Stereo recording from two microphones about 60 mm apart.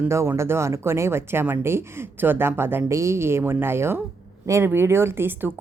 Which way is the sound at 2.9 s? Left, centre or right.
Right.